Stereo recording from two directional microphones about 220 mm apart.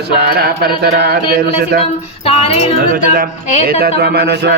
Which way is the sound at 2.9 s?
40° right (ahead or behind).